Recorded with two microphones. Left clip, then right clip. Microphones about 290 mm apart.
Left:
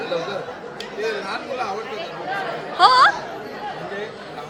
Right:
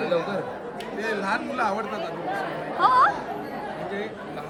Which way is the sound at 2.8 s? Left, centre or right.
Centre.